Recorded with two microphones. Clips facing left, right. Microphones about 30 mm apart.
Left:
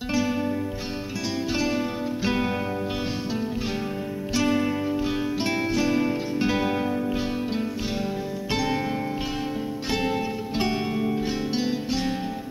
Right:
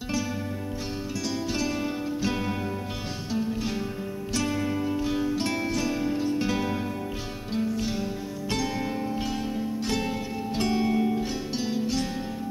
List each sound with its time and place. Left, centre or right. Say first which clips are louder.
1.5 s music: left 5 dB; centre
4.3 s music: left 5 dB; centre
8.5 s music: left 3 dB; centre